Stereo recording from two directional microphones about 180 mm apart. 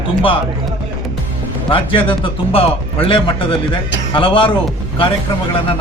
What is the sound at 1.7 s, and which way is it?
A man's voice, 30° left (ahead or behind).